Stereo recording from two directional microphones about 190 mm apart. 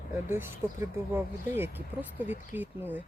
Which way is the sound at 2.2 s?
40° left (ahead or behind).